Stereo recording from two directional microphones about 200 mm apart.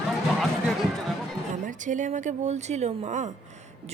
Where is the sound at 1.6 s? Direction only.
40° right (ahead or behind).